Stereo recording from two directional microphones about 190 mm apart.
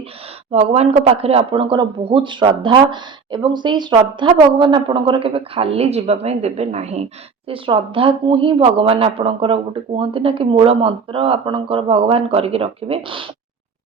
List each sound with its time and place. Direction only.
0.5 s speech: 30° right (ahead or behind)